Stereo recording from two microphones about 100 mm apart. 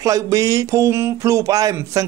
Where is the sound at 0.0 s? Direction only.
35° right (ahead or behind).